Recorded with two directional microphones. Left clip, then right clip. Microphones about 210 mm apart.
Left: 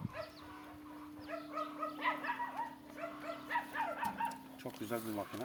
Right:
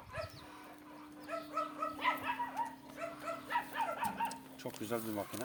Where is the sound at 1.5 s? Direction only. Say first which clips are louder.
Right 2 dB; 45° right (ahead or behind).